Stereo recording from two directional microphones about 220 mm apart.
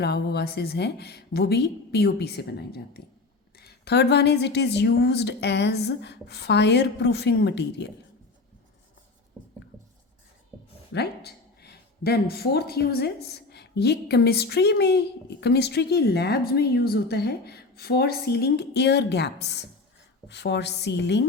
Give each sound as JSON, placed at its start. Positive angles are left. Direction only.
{"t": 0.0, "sound": "speech", "side_deg": 50}
{"t": 10.9, "sound": "speech", "side_deg": 45}